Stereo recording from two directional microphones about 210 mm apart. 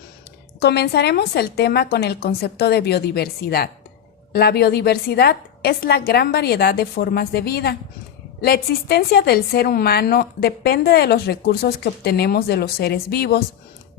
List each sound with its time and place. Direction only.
0.6 s a woman's voice: 50° left (ahead or behind)